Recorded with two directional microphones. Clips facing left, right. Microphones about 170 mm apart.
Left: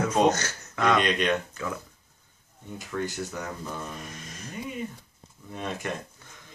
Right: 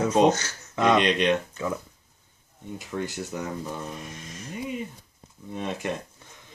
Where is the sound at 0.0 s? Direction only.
20° right (ahead or behind).